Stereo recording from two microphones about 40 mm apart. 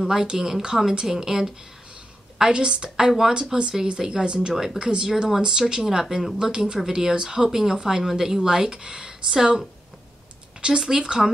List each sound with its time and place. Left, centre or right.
0.0 s speech: centre
3.1 s speech: centre
10.6 s speech: centre